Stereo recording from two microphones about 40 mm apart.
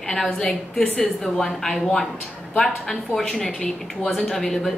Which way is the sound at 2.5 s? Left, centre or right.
Centre.